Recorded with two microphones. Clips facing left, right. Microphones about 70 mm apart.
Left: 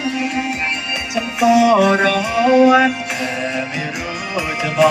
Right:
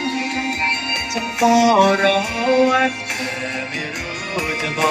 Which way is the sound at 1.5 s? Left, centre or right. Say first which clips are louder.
Left 1 dB; right.